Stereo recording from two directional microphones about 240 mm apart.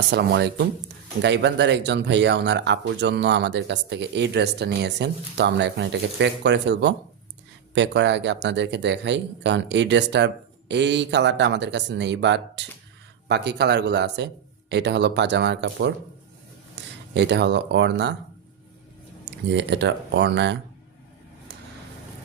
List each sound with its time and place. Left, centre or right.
0.1 s speech: right
19.2 s speech: right